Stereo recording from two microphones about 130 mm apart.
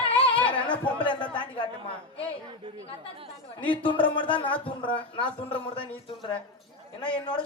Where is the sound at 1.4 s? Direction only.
40° left (ahead or behind).